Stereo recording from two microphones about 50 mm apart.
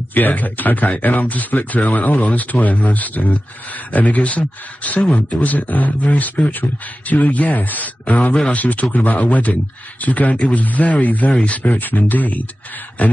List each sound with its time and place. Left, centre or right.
0.1 s speech: left